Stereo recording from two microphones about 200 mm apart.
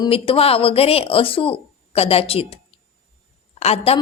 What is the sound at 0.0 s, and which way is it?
A woman's voice, 30° left (ahead or behind).